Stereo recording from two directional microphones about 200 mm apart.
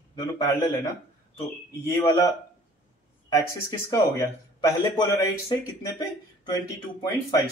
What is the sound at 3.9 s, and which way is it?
Speech, 15° left (ahead or behind).